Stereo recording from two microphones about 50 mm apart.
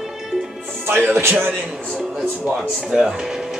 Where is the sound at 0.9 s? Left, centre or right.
Right.